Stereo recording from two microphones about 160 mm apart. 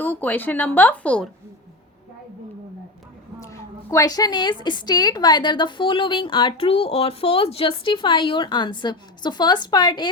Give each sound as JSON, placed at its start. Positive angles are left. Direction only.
{"t": 0.0, "sound": "speech", "side_deg": 10}
{"t": 3.4, "sound": "a woman's voice", "side_deg": 20}